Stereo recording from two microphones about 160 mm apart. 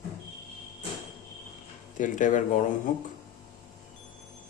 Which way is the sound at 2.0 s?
55° left (ahead or behind).